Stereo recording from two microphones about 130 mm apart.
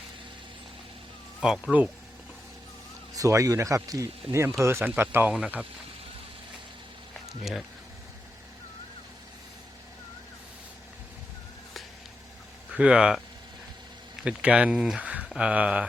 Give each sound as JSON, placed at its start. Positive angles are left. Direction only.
{"t": 1.4, "sound": "speech", "side_deg": -5}
{"t": 3.2, "sound": "speech", "side_deg": -25}
{"t": 12.7, "sound": "speech", "side_deg": -10}